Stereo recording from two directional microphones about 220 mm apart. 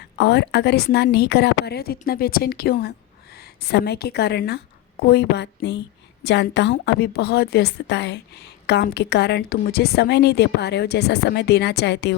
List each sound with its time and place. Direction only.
0.2 s a woman's voice: 50° left (ahead or behind)